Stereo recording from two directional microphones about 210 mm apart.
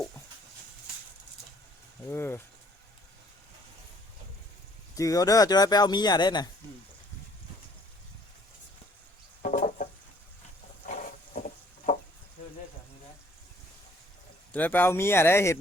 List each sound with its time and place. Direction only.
2.0 s speech: 10° left (ahead or behind)
4.9 s speech: 15° left (ahead or behind)
9.4 s a sound: 40° left (ahead or behind)
14.5 s speech: 10° left (ahead or behind)